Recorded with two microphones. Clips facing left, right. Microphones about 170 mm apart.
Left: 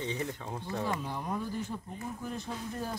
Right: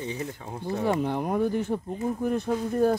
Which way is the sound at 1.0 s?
65° right (ahead or behind).